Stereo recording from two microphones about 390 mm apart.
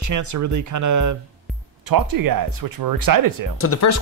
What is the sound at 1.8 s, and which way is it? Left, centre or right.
Speech, right.